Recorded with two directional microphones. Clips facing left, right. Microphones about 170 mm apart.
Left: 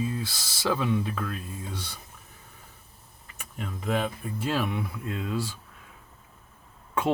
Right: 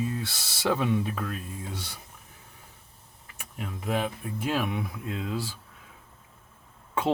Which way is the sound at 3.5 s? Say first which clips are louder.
Left 1 dB; 5° right (ahead or behind).